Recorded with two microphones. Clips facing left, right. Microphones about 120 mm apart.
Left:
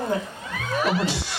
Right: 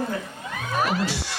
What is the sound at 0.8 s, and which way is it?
Speech, 45° right (ahead or behind).